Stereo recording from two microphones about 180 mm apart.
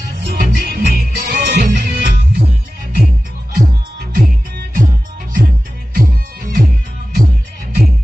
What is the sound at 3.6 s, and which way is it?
Music, 50° right (ahead or behind).